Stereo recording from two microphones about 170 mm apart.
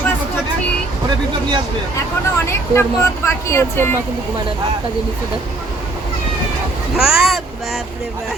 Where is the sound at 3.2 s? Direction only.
15° left (ahead or behind).